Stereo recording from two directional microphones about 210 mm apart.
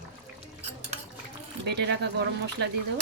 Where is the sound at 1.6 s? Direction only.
55° right (ahead or behind).